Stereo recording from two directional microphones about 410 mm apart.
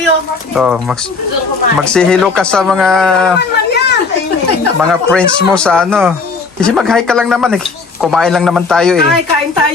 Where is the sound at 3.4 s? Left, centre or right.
Left.